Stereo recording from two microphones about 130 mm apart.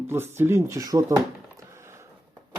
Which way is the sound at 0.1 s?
20° right (ahead or behind).